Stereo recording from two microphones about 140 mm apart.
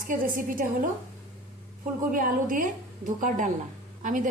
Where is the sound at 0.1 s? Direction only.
75° right (ahead or behind).